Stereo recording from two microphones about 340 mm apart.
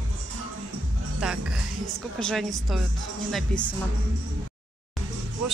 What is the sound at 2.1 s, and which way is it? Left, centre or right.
Speech, centre.